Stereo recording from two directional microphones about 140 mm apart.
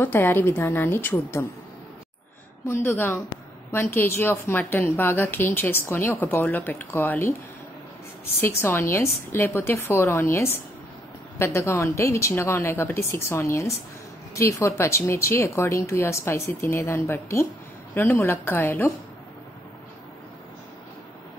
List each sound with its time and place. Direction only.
0.0 s a woman's voice: 15° left (ahead or behind)
2.6 s a woman's voice: 15° left (ahead or behind)
8.4 s a woman's voice: 20° left (ahead or behind)